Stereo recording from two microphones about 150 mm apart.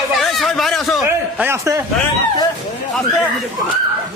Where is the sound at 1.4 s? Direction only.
20° right (ahead or behind).